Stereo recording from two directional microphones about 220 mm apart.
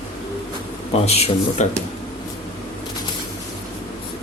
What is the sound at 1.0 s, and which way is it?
Speech, 30° left (ahead or behind).